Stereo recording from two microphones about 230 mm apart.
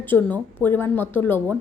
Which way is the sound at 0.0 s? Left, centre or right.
Centre.